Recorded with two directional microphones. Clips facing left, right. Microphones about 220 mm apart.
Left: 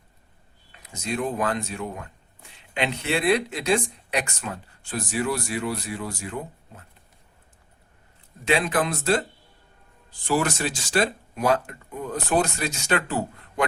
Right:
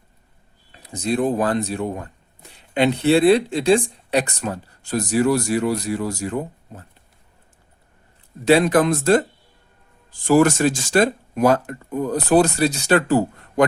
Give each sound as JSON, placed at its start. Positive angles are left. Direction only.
{"t": 0.7, "sound": "speech", "side_deg": -35}
{"t": 8.4, "sound": "speech", "side_deg": -40}
{"t": 10.2, "sound": "speech", "side_deg": -45}